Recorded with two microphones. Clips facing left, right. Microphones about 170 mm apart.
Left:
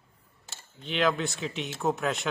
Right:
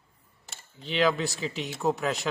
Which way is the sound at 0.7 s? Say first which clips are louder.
Right 2 dB; centre (ahead or behind).